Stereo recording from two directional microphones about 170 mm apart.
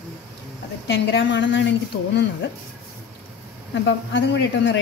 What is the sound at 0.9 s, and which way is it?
Speech, 90° left.